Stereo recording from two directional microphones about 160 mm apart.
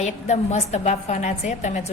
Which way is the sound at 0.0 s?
45° left (ahead or behind).